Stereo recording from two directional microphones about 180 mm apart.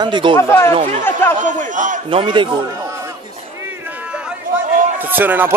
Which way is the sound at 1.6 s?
45° right (ahead or behind).